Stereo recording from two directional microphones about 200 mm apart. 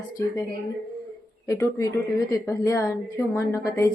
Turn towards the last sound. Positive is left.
turn(degrees=15)  # may be behind; listen again after turning